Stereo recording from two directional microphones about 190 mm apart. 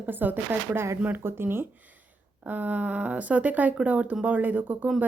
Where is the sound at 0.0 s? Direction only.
10° right (ahead or behind).